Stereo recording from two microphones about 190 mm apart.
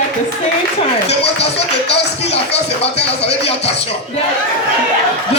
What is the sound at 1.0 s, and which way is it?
Speech, 60° left (ahead or behind).